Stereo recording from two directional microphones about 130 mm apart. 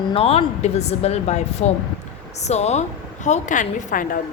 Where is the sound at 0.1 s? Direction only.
50° left (ahead or behind).